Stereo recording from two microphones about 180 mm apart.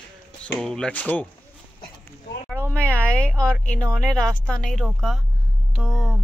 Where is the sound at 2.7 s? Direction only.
5° left (ahead or behind).